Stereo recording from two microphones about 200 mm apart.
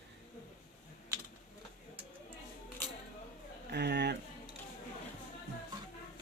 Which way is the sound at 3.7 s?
55° right (ahead or behind).